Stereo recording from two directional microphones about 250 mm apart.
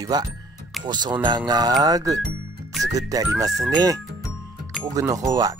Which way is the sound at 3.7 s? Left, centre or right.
Centre.